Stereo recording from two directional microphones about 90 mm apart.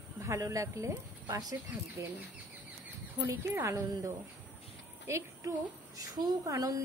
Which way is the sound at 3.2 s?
25° right (ahead or behind).